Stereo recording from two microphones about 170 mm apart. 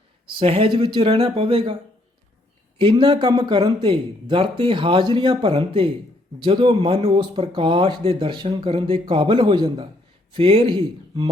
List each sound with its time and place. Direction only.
0.3 s speech: 35° right (ahead or behind)
2.7 s speech: 30° right (ahead or behind)